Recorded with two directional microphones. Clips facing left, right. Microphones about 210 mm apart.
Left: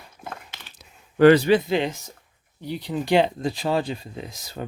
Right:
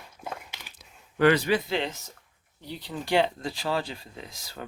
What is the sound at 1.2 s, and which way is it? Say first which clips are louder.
Speech: left 7 dB; 35° left (ahead or behind).